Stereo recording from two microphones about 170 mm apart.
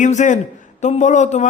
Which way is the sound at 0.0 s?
45° left (ahead or behind).